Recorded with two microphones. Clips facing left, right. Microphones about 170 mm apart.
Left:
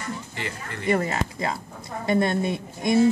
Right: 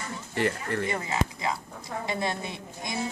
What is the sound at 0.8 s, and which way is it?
A woman's voice, 60° left (ahead or behind).